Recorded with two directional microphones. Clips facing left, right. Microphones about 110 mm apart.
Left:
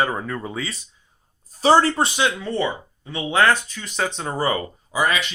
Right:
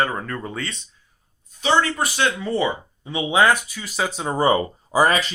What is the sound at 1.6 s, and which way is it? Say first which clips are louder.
Speech: left 4 dB; 40° left (ahead or behind).